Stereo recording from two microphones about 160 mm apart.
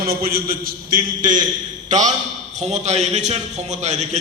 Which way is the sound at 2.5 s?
45° right (ahead or behind).